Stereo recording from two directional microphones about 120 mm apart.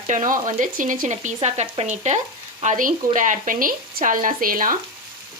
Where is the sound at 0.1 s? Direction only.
90° right.